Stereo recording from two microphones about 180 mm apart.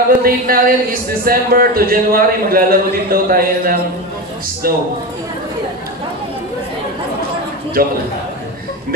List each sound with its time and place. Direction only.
0.1 s a man's voice: 55° right (ahead or behind)
7.8 s a man's voice: 55° right (ahead or behind)